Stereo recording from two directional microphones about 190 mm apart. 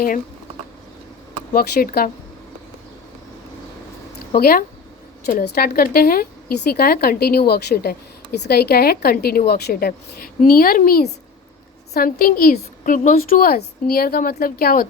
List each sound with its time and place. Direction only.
1.5 s a woman's voice: 50° left (ahead or behind)
4.4 s a woman's voice: 50° left (ahead or behind)